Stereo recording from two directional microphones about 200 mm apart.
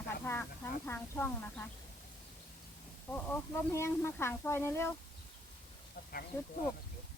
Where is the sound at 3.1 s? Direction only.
10° left (ahead or behind).